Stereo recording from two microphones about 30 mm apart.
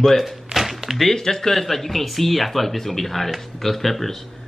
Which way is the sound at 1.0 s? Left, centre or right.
Centre.